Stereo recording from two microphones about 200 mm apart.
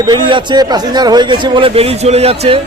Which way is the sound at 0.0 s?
20° right (ahead or behind).